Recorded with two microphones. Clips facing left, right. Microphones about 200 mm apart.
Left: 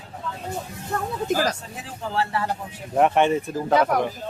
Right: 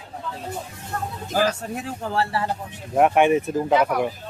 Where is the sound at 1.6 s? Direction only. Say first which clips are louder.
Right 5 dB; 55° right (ahead or behind).